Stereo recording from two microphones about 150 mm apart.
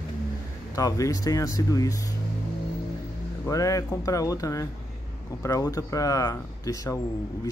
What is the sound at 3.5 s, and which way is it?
Speech, 20° left (ahead or behind).